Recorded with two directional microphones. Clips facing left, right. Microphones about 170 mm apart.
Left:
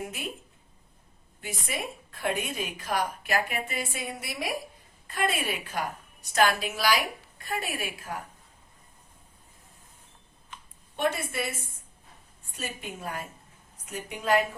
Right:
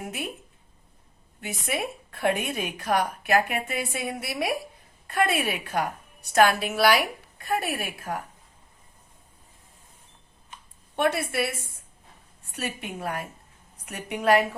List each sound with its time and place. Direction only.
1.4 s a woman's voice: 60° right (ahead or behind)
10.9 s a woman's voice: 65° right (ahead or behind)